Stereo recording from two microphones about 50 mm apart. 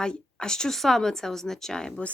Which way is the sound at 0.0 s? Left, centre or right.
Centre.